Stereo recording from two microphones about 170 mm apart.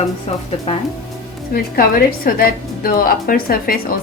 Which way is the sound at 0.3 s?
35° left (ahead or behind).